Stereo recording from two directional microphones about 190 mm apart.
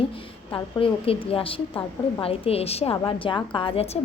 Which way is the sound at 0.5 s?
30° left (ahead or behind).